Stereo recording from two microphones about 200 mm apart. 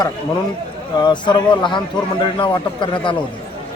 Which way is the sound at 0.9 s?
20° left (ahead or behind).